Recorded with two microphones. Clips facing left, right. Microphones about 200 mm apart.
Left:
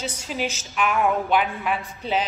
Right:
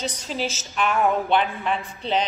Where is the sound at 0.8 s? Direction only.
Centre (ahead or behind).